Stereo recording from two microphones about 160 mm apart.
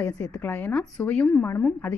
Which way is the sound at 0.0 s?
15° left (ahead or behind).